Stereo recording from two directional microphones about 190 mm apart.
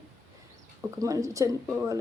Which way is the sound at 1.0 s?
15° right (ahead or behind).